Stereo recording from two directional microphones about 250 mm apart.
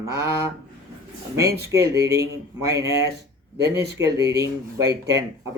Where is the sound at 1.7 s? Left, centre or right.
Centre.